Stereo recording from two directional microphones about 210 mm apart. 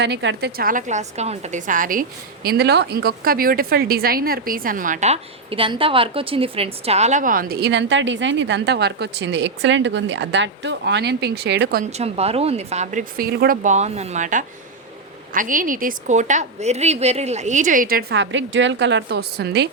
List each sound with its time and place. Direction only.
0.0 s a woman's voice: 55° right (ahead or behind)
11.9 s a woman's voice: 30° right (ahead or behind); by 19.6 s 50° right (ahead or behind)